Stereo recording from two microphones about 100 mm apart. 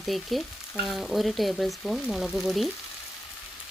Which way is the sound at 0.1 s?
Centre (ahead or behind).